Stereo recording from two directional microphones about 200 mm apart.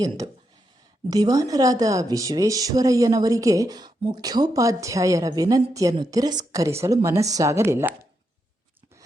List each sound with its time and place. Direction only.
1.0 s speech: 20° right (ahead or behind)